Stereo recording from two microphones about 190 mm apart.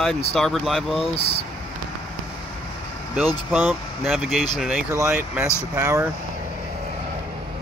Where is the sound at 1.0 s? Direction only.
30° left (ahead or behind).